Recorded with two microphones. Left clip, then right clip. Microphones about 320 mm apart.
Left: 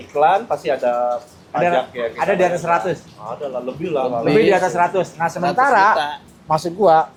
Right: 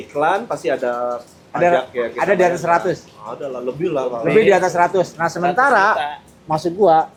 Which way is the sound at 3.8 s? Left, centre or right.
Right.